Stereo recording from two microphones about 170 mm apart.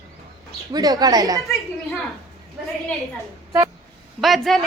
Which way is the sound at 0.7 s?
20° right (ahead or behind).